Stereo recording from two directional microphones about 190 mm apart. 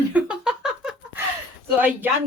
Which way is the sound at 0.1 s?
5° right (ahead or behind).